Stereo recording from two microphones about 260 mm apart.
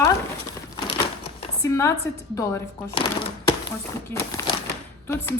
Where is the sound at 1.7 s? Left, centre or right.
Centre.